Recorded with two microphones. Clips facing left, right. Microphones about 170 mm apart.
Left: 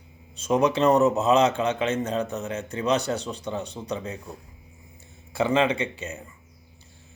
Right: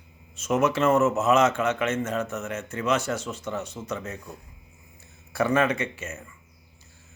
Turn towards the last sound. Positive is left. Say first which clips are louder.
# left 2 dB
turn(degrees=30)  # may be behind; listen again after turning